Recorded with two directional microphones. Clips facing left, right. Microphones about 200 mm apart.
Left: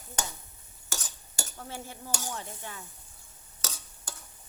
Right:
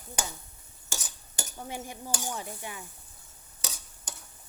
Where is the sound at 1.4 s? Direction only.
15° right (ahead or behind).